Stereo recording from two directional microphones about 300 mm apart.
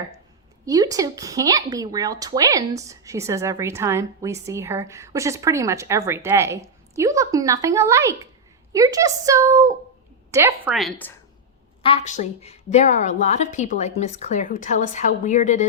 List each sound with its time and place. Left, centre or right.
0.6 s a woman's voice: centre
11.8 s a woman's voice: centre